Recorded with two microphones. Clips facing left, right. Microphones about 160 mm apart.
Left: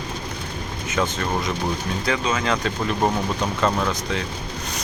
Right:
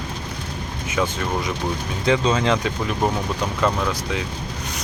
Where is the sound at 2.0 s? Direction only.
25° right (ahead or behind).